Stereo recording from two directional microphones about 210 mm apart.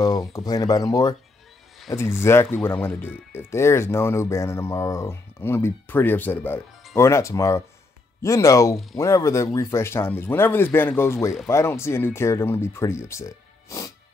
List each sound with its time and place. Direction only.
0.0 s speech: 15° left (ahead or behind)